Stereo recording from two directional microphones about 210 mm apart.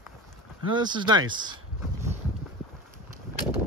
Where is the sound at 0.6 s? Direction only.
20° right (ahead or behind).